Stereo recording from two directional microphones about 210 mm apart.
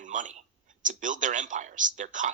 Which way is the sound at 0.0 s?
35° right (ahead or behind).